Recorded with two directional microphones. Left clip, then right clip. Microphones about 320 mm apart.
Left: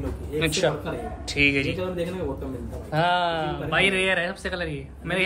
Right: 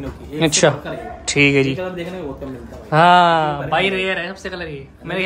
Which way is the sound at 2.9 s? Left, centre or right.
Right.